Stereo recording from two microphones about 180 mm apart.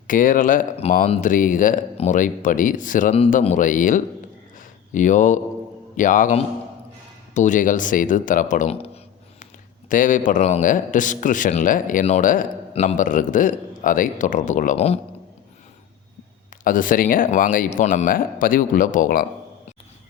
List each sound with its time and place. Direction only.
0.1 s a man's voice: 50° left (ahead or behind)
4.5 s a sound: 45° left (ahead or behind)
6.0 s a man's voice: 45° left (ahead or behind)
9.9 s a man's voice: 45° left (ahead or behind)
16.6 s a man's voice: 50° left (ahead or behind)